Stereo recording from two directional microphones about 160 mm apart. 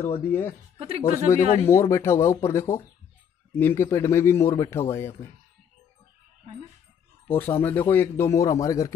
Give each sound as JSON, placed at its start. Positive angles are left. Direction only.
{"t": 0.2, "sound": "a man's voice", "side_deg": 15}
{"t": 0.7, "sound": "speech", "side_deg": -40}
{"t": 1.3, "sound": "a man's voice", "side_deg": 15}
{"t": 7.2, "sound": "a man's voice", "side_deg": 15}